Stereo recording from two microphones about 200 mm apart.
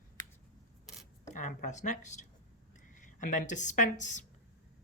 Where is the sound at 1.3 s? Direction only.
40° left (ahead or behind).